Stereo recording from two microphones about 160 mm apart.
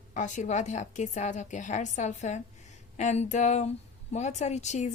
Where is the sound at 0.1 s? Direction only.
50° left (ahead or behind).